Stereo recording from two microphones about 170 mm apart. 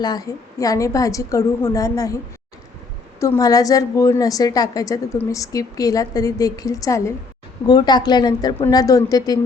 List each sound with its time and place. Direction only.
0.0 s a woman's voice: 25° left (ahead or behind)
3.2 s a woman's voice: 20° left (ahead or behind)